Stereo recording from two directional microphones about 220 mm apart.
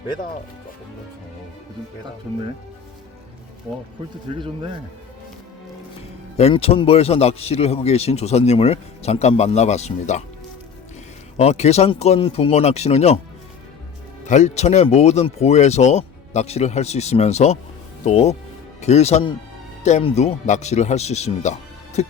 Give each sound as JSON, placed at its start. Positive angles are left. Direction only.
{"t": 6.3, "sound": "a man's voice", "side_deg": 25}
{"t": 11.3, "sound": "a man's voice", "side_deg": 30}
{"t": 14.3, "sound": "a man's voice", "side_deg": 30}